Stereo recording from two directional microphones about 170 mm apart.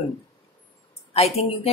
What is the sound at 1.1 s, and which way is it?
Speech, 35° left (ahead or behind).